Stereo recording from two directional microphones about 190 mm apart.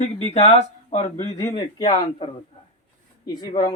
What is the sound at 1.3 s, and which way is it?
A man's voice, 15° left (ahead or behind).